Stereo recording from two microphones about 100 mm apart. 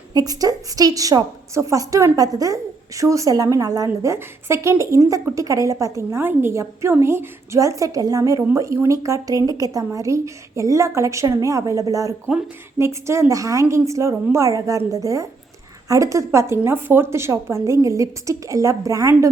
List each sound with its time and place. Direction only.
0.1 s a woman's voice: 40° right (ahead or behind)